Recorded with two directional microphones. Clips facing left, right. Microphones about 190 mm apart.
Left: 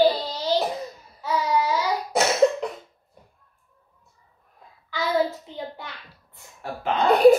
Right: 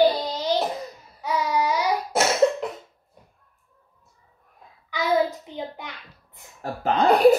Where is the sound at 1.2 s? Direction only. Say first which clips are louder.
Left 1 dB; 15° right (ahead or behind).